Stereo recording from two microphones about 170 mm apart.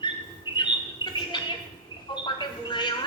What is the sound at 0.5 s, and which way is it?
Bird, 25° left (ahead or behind).